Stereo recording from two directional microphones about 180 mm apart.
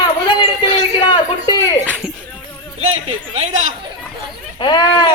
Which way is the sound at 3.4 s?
40° right (ahead or behind).